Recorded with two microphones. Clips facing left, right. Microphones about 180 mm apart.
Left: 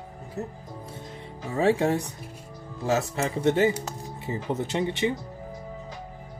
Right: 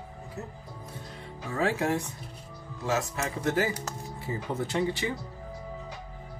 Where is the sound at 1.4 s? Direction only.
25° left (ahead or behind).